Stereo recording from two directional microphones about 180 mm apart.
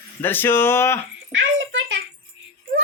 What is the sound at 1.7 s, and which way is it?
Rattle, 85° right.